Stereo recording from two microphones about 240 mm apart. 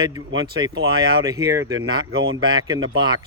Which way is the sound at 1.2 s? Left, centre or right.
Centre.